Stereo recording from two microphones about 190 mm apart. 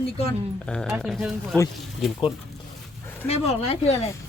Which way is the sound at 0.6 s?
5° left (ahead or behind).